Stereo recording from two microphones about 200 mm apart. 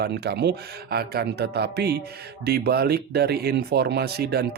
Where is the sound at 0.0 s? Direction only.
55° right (ahead or behind).